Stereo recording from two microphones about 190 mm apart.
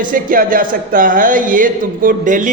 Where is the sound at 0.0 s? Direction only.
45° right (ahead or behind).